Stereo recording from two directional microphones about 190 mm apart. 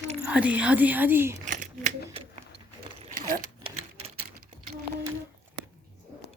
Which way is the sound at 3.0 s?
45° right (ahead or behind).